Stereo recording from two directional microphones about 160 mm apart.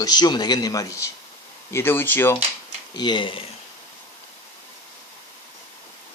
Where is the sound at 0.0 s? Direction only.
25° left (ahead or behind).